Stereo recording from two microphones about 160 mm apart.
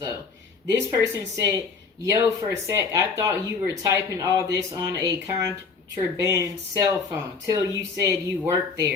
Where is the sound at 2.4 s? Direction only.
20° right (ahead or behind).